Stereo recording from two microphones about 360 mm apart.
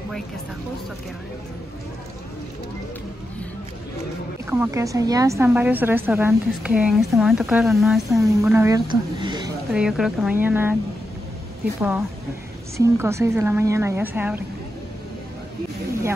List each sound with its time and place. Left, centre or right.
4.5 s a woman's voice: centre
12.7 s a woman's voice: centre